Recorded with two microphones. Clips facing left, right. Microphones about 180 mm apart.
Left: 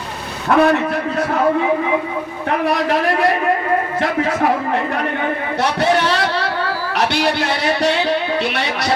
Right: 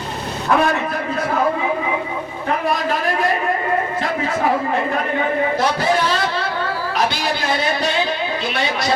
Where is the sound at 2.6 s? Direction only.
70° left (ahead or behind).